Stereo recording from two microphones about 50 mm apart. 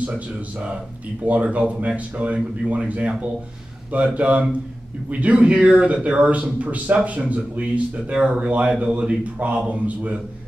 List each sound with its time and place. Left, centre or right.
1.2 s speech: right